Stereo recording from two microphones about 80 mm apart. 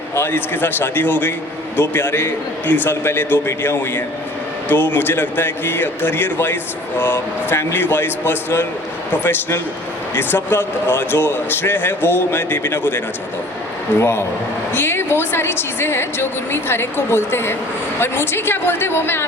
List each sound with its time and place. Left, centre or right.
0.1 s a woman's voice: left
14.0 s a man's voice: left